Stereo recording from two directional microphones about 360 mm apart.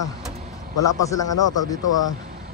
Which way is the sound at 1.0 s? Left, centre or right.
Centre.